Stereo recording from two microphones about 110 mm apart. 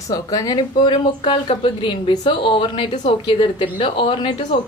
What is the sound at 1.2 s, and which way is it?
A woman's voice, 50° left (ahead or behind).